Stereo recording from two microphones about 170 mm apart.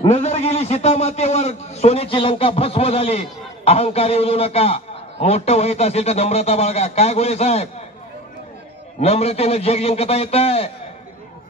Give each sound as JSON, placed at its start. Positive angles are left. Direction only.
{"t": 0.0, "sound": "a man's voice", "side_deg": 40}
{"t": 9.0, "sound": "a man's voice", "side_deg": 35}